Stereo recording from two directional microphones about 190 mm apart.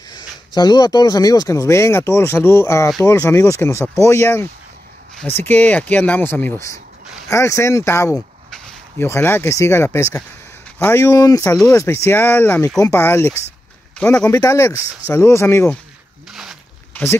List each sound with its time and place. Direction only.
0.1 s speech: 20° left (ahead or behind); by 14.3 s 5° left (ahead or behind)
14.3 s speech: 15° left (ahead or behind)
16.3 s a sound: centre (ahead or behind)